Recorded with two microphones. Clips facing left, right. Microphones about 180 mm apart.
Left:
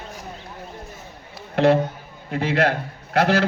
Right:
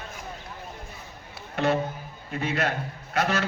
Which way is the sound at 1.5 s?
60° left (ahead or behind).